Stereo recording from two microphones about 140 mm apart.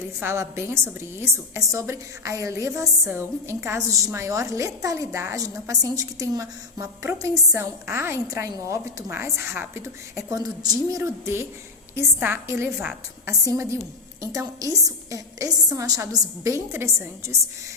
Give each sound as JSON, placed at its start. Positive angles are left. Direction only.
{"t": 0.2, "sound": "a woman's voice", "side_deg": -20}